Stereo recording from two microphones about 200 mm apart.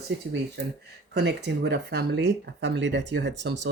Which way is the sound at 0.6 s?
55° right (ahead or behind).